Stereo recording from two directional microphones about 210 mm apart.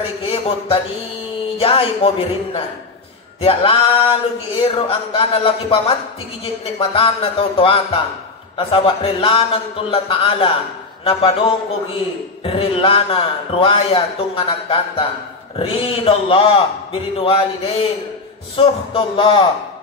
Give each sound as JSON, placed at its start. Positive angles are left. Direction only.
{"t": 0.0, "sound": "a man's voice", "side_deg": 30}
{"t": 12.4, "sound": "a man's voice", "side_deg": 25}